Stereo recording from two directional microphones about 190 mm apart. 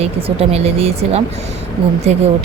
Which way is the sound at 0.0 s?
30° right (ahead or behind).